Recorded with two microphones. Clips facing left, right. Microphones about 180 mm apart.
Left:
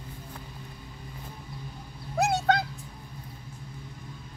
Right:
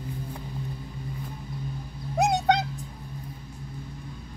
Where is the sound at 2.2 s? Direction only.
20° right (ahead or behind).